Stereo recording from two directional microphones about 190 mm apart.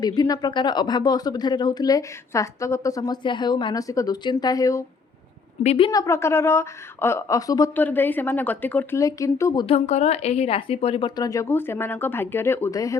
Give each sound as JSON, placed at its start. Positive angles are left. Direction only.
{"t": 0.0, "sound": "speech", "side_deg": 20}
{"t": 5.6, "sound": "a woman's voice", "side_deg": 30}
{"t": 5.9, "sound": "speech", "side_deg": 15}
{"t": 9.6, "sound": "speech", "side_deg": 35}